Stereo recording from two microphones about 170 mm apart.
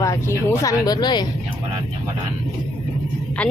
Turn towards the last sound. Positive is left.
turn(degrees=5)  # may be behind; listen again after turning